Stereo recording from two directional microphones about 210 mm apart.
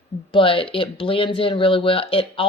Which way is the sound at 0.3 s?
25° left (ahead or behind).